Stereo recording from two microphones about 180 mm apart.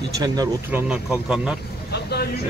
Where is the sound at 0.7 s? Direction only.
5° right (ahead or behind).